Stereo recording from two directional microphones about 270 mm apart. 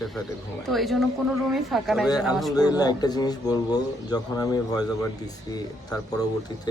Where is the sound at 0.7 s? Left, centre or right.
Centre.